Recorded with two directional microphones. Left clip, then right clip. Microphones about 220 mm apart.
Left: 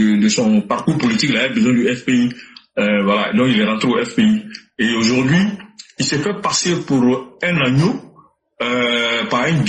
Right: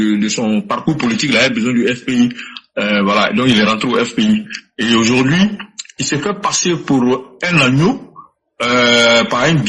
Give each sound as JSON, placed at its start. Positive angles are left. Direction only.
{"t": 0.0, "sound": "a man's voice", "side_deg": -45}
{"t": 8.5, "sound": "a man's voice", "side_deg": -50}